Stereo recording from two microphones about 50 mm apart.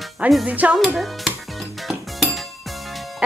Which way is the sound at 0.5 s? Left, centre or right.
Right.